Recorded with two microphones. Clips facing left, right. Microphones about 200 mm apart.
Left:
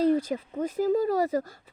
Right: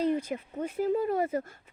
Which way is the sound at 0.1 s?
35° left (ahead or behind).